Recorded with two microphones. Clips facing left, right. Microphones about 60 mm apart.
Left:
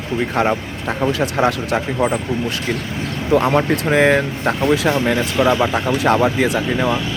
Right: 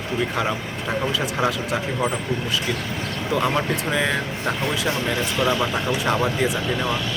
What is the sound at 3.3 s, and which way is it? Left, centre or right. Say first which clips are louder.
Speech: left 7 dB; left.